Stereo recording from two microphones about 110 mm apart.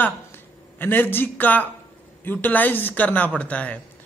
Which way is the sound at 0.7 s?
15° left (ahead or behind).